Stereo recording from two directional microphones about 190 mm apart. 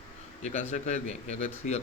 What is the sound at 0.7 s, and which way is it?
Speech, 35° left (ahead or behind).